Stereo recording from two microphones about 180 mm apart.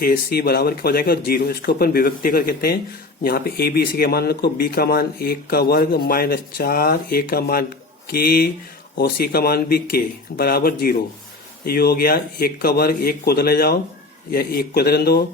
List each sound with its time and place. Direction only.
0.0 s speech: 60° left (ahead or behind)